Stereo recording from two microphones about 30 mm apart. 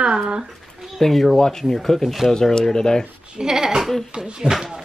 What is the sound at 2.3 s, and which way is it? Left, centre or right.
Speech, centre.